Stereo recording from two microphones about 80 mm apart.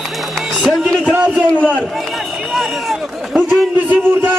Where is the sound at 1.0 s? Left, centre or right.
Centre.